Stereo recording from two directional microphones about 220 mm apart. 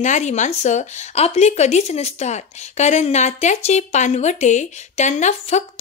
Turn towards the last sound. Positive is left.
turn(degrees=30)  # may be behind; listen again after turning